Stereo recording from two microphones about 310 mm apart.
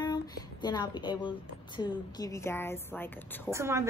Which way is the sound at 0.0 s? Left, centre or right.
Centre.